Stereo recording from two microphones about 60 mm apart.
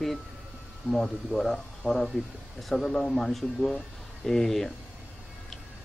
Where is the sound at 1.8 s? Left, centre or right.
Left.